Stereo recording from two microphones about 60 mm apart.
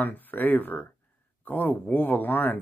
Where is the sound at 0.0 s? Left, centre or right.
Left.